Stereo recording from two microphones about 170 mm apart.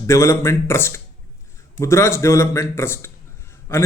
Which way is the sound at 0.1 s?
15° left (ahead or behind).